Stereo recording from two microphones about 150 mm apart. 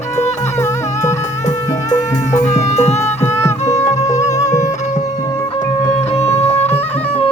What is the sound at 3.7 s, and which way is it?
Music, 50° left (ahead or behind).